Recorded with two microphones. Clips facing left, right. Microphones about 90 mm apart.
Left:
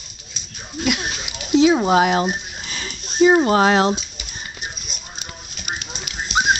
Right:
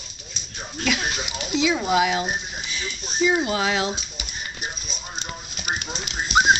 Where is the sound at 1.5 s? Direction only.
40° left (ahead or behind).